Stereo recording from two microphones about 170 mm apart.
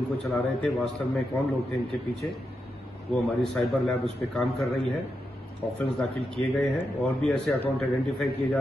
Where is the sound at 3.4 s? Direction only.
Centre (ahead or behind).